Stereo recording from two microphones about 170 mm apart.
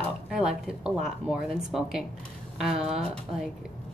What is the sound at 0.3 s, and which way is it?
A woman's voice, 5° right (ahead or behind).